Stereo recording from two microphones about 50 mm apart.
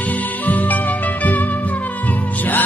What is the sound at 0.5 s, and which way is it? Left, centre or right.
Music, left.